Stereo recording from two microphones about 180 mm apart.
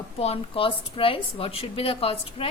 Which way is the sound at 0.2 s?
35° left (ahead or behind).